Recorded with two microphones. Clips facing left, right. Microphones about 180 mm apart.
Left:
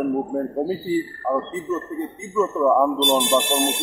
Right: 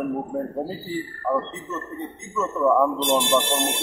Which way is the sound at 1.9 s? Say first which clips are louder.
Left 5 dB; 90° left.